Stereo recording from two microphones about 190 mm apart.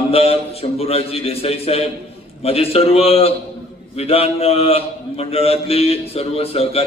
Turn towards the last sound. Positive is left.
turn(degrees=30)  # may be behind; listen again after turning